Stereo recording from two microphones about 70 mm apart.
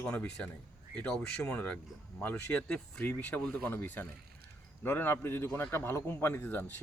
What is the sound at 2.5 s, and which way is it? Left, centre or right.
Speech, centre.